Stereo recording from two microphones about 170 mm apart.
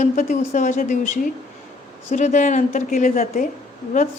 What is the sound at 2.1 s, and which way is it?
A woman's voice, 45° left (ahead or behind).